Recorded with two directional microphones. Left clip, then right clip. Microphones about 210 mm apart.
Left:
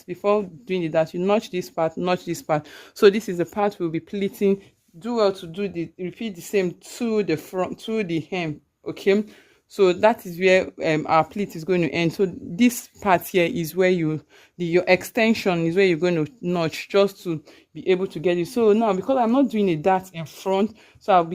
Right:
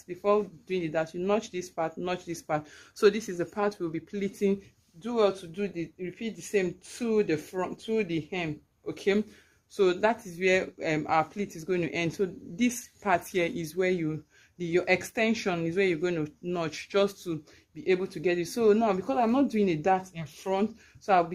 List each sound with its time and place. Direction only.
0.1 s speech: 45° left (ahead or behind)